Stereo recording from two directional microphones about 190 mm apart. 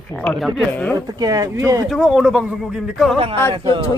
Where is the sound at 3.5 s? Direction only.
25° right (ahead or behind).